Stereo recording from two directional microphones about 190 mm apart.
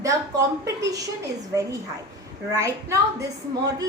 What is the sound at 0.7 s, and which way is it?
Speech, 15° right (ahead or behind).